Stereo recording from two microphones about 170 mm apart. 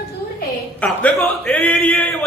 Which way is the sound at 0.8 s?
10° left (ahead or behind).